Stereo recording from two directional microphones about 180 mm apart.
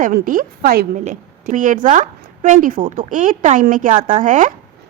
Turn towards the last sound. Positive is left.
turn(degrees=-45)  # may be behind; listen again after turning